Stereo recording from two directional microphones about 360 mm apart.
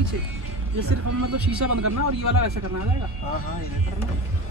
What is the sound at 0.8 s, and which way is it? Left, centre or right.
A man's voice, right.